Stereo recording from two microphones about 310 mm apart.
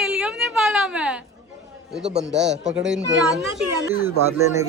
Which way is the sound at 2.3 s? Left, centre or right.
Right.